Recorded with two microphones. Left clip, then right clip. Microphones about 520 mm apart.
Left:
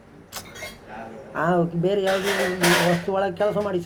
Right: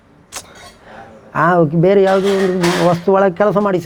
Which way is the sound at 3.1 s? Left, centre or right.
Right.